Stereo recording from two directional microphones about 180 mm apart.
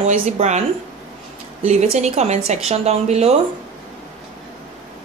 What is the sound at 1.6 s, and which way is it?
A woman's voice, 40° right (ahead or behind).